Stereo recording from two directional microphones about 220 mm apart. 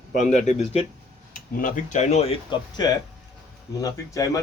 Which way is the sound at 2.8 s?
20° left (ahead or behind).